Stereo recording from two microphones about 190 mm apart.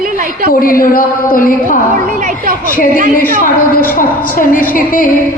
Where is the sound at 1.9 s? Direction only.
45° right (ahead or behind).